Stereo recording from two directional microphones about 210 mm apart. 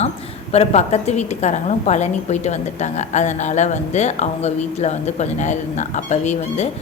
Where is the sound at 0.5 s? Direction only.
30° left (ahead or behind).